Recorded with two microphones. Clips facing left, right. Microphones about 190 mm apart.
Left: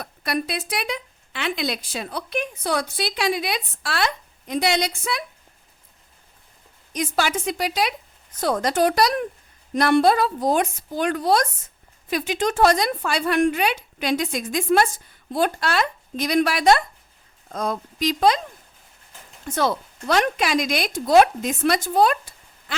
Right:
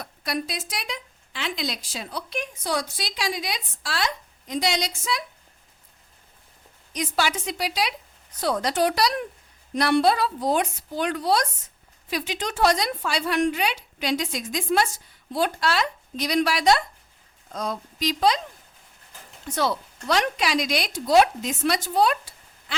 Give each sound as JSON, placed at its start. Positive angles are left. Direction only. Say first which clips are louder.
{"t": 0.0, "sound": "a woman's voice", "louder": "left 3 dB", "side_deg": 60}
{"t": 6.9, "sound": "a woman's voice", "louder": "left 2 dB", "side_deg": 50}
{"t": 19.5, "sound": "a woman's voice", "louder": "left 3 dB", "side_deg": 50}